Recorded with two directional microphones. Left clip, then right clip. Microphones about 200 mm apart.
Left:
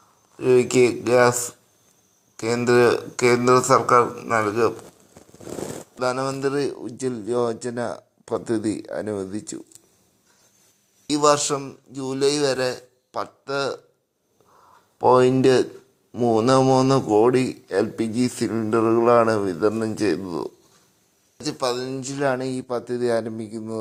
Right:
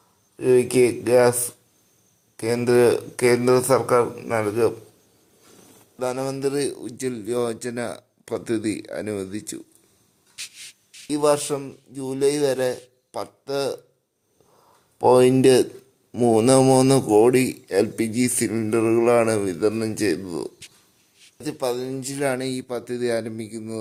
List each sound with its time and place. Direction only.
0.3 s a man's voice: centre (ahead or behind)
6.0 s a man's voice: 5° right (ahead or behind)
11.1 s a man's voice: 5° right (ahead or behind)
14.9 s a man's voice: 15° right (ahead or behind); by 23.7 s centre (ahead or behind)